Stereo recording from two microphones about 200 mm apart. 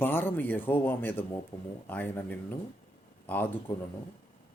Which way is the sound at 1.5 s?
20° left (ahead or behind).